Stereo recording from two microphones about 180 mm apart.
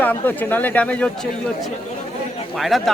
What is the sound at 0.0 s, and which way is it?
Speech, 10° left (ahead or behind).